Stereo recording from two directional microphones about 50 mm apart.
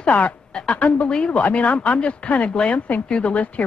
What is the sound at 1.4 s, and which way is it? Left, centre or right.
Speech, left.